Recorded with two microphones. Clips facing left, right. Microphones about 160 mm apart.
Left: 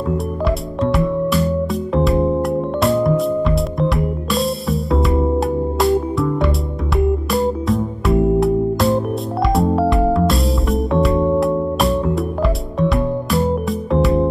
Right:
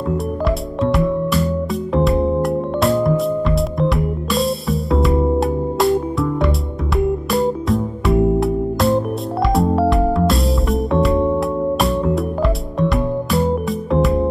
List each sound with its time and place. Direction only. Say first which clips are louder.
0.8 s music: even; centre (ahead or behind)